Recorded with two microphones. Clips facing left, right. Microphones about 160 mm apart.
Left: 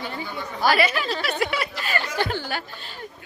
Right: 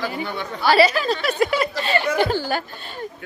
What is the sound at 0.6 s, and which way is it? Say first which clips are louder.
Speech: right 5 dB; 35° right (ahead or behind).